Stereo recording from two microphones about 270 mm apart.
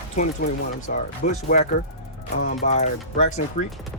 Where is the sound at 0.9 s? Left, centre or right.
Left.